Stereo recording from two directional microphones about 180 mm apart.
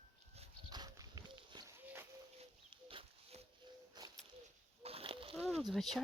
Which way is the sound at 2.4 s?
30° right (ahead or behind).